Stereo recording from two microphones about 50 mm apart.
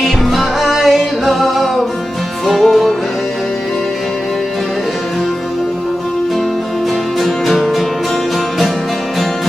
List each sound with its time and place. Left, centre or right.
0.0 s music: centre
7.2 s music: centre